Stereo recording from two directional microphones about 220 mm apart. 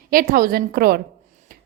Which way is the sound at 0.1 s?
40° right (ahead or behind).